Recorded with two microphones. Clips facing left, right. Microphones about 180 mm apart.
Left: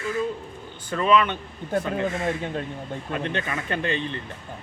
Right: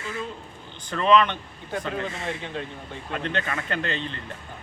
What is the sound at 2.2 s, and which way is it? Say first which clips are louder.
Speech: left 5 dB; 45° left (ahead or behind).